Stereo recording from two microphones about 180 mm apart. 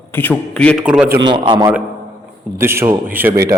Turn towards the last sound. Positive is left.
turn(degrees=-10)  # may be behind; listen again after turning